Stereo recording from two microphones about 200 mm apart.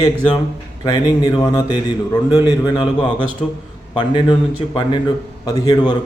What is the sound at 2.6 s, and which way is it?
A man's voice, 20° left (ahead or behind).